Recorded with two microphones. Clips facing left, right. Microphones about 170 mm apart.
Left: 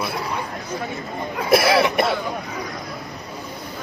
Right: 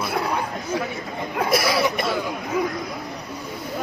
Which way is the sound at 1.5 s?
60° left (ahead or behind).